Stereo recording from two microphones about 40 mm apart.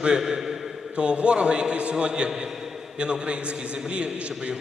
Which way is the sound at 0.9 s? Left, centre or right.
Right.